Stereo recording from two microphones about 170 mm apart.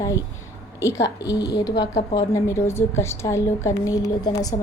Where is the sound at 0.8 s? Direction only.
20° left (ahead or behind).